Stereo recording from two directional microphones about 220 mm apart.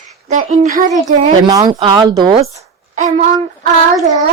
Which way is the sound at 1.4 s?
15° right (ahead or behind).